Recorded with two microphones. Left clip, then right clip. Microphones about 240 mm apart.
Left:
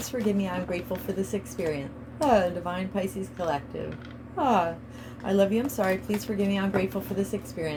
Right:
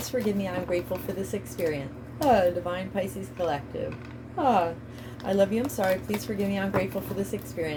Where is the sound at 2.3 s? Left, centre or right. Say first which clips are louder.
Right 2 dB; left.